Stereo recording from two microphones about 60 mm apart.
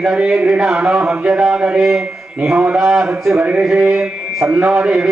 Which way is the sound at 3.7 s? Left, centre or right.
Centre.